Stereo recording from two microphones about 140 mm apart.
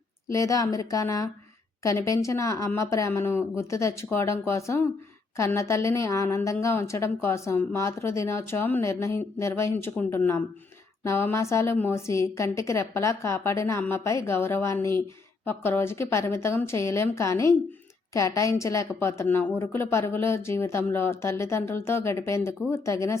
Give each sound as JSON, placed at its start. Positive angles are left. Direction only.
{"t": 0.3, "sound": "a woman's voice", "side_deg": 20}